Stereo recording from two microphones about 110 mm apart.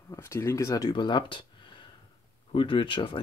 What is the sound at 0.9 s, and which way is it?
Speech, 45° left (ahead or behind).